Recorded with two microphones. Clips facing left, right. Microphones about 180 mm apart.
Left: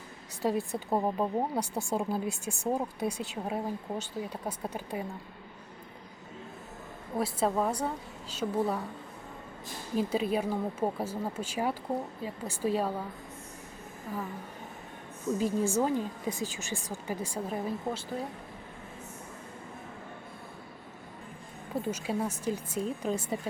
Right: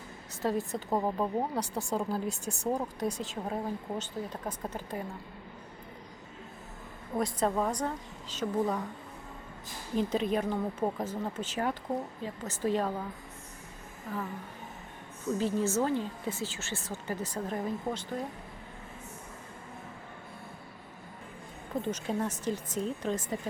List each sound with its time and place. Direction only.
0.4 s speech: 10° left (ahead or behind)
7.2 s speech: 5° left (ahead or behind)
9.9 s speech: 10° left (ahead or behind)
14.1 s speech: 10° left (ahead or behind)
15.4 s speech: 10° left (ahead or behind)
21.8 s speech: 10° left (ahead or behind)